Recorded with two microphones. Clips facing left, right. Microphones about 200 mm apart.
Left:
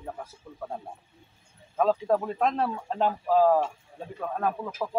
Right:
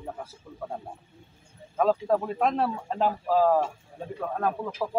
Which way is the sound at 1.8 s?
Centre (ahead or behind).